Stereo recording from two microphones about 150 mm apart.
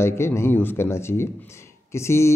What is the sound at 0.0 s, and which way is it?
Speech, 15° left (ahead or behind).